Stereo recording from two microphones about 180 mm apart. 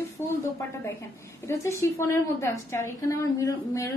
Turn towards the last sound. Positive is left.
turn(degrees=20)  # may be behind; listen again after turning